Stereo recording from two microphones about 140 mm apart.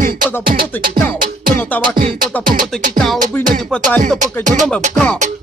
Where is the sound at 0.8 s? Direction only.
85° right.